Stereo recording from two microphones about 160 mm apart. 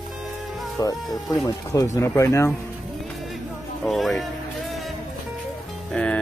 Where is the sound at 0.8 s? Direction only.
20° left (ahead or behind).